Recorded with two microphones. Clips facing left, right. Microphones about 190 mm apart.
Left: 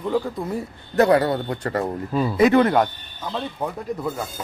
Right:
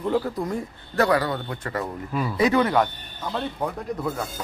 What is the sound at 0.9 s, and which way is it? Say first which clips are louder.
A man's voice: left 5 dB; 25° left (ahead or behind).